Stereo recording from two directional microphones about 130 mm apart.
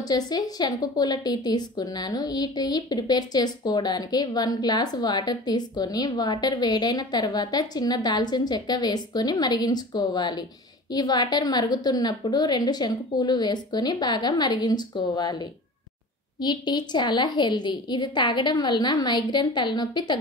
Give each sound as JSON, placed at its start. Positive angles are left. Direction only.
{"t": 0.1, "sound": "a woman's voice", "side_deg": 30}